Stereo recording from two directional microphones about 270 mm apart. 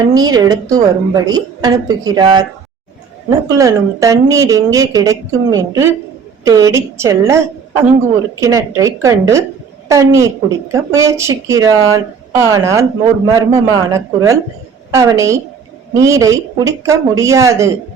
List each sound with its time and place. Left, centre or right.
0.1 s a woman's voice: centre